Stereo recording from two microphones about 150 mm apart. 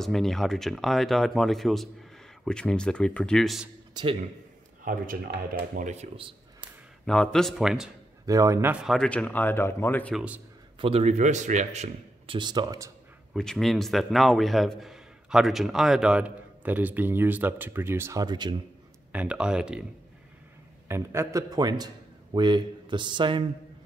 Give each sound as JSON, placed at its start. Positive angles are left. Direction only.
{"t": 0.0, "sound": "a man's voice", "side_deg": 0}
{"t": 3.9, "sound": "a man's voice", "side_deg": -35}
{"t": 4.8, "sound": "speech", "side_deg": -70}
{"t": 7.1, "sound": "a man's voice", "side_deg": 5}
{"t": 8.3, "sound": "a man's voice", "side_deg": -20}
{"t": 8.8, "sound": "speech", "side_deg": 5}
{"t": 10.1, "sound": "a man's voice", "side_deg": -10}
{"t": 10.8, "sound": "a man's voice", "side_deg": -40}
{"t": 12.4, "sound": "a man's voice", "side_deg": -30}
{"t": 13.3, "sound": "a man's voice", "side_deg": 0}
{"t": 19.1, "sound": "a man's voice", "side_deg": -5}
{"t": 20.9, "sound": "a man's voice", "side_deg": -20}